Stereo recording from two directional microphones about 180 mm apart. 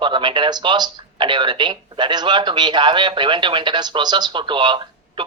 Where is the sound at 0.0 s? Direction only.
25° right (ahead or behind).